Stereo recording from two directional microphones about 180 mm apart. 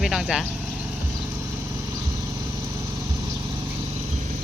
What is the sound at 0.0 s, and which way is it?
Speech, centre (ahead or behind).